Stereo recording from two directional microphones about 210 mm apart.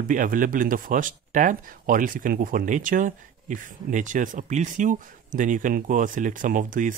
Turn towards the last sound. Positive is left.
turn(degrees=-40)  # may be behind; listen again after turning